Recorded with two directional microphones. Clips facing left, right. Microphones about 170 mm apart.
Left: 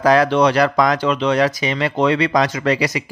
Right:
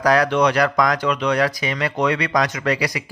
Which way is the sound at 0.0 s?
25° left (ahead or behind).